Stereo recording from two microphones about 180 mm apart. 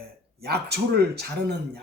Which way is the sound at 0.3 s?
60° right (ahead or behind).